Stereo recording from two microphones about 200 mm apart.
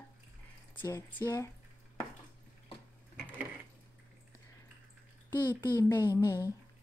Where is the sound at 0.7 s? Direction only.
10° left (ahead or behind).